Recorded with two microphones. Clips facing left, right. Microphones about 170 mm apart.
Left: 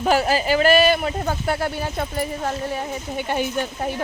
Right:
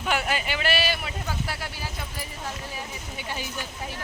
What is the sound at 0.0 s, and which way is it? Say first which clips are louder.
Speech: left 8 dB; 35° left (ahead or behind).